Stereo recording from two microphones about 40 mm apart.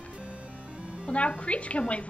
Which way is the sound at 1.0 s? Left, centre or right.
Left.